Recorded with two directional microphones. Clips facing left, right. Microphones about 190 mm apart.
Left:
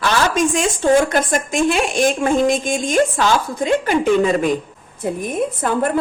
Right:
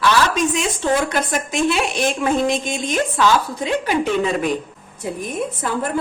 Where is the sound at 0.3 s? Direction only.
45° left (ahead or behind).